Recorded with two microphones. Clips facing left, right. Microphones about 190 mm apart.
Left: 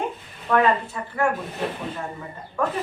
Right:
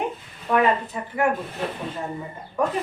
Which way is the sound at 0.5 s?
15° right (ahead or behind).